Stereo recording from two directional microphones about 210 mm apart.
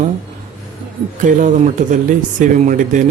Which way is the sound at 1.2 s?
35° right (ahead or behind).